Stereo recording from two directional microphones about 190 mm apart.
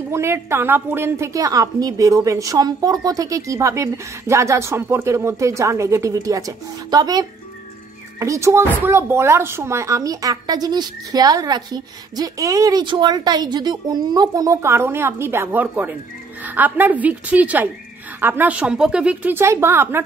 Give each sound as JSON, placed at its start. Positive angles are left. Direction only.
{"t": 0.1, "sound": "speech", "side_deg": -15}